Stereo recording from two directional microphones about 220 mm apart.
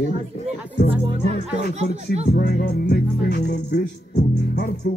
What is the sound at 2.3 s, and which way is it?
Music, 40° left (ahead or behind).